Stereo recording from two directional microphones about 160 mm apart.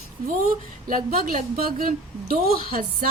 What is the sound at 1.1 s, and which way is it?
A woman's voice, 65° right (ahead or behind).